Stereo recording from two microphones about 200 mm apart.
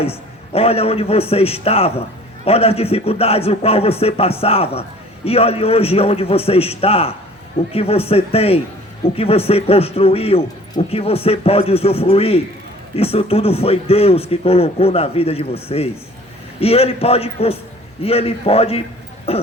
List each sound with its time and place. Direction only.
0.0 s a man's voice: 30° left (ahead or behind)